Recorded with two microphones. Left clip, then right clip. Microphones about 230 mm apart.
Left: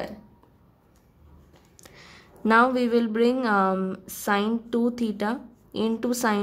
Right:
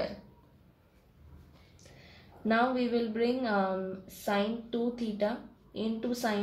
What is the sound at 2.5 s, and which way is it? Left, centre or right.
A woman's voice, left.